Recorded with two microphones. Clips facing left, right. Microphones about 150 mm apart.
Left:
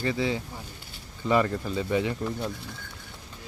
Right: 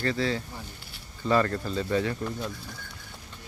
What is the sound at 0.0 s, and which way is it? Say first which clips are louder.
Speech: even; 15° left (ahead or behind).